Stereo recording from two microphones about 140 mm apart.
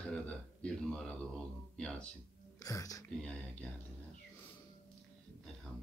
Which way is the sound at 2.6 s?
25° left (ahead or behind).